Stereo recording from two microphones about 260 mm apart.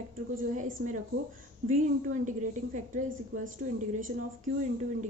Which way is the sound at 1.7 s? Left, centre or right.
Right.